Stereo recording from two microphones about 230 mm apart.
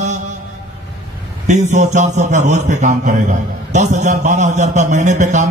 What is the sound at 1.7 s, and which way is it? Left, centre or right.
A man's voice, right.